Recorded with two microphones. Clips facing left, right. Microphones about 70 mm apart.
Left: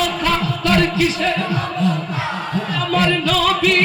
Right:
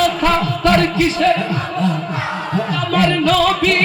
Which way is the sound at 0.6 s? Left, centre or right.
Right.